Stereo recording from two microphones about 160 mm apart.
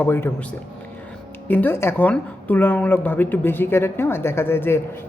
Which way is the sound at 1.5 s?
10° left (ahead or behind).